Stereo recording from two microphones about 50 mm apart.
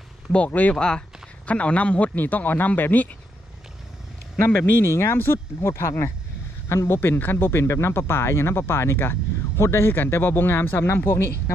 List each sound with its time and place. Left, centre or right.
0.3 s a man's voice: left
0.7 s speech: centre
1.4 s a man's voice: left
4.5 s speech: left
7.0 s speech: left
7.6 s speech: left
7.9 s speech: left